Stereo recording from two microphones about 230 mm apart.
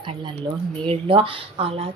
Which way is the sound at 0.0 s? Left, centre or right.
Right.